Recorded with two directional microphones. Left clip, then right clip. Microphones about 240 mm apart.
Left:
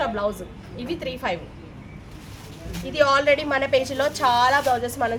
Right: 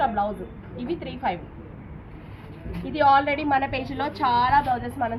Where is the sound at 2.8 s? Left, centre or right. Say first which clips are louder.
Left 1 dB; left.